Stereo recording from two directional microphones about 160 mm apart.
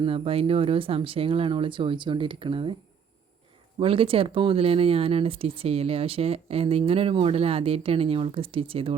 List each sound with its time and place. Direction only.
0.0 s speech: 35° right (ahead or behind)
3.8 s speech: 35° right (ahead or behind)